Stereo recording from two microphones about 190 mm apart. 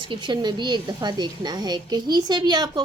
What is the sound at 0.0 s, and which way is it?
A woman's voice, 25° right (ahead or behind).